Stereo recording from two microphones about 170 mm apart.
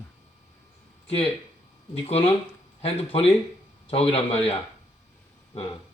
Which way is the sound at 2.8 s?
35° left (ahead or behind).